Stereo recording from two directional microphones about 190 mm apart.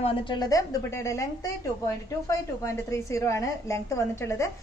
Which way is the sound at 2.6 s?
15° left (ahead or behind).